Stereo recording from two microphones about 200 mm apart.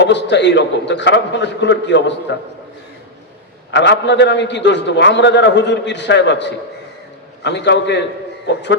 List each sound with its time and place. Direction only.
0.0 s a man's voice: 60° left (ahead or behind)
3.7 s a man's voice: 60° left (ahead or behind)